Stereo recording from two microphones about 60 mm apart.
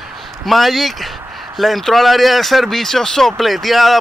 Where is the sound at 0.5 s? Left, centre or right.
Centre.